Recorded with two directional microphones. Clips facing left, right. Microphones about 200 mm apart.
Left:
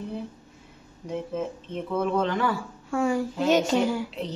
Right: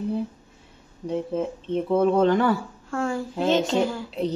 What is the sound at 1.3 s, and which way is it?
Speech, 35° right (ahead or behind).